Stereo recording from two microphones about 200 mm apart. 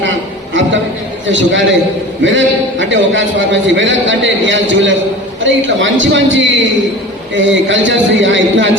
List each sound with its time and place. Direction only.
1.3 s a man's voice: 70° right (ahead or behind)